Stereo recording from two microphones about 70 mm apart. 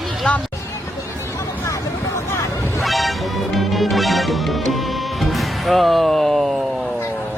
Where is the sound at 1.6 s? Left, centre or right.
Left.